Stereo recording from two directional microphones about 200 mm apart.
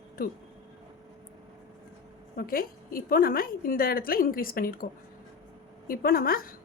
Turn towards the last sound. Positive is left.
turn(degrees=45)  # may be behind; listen again after turning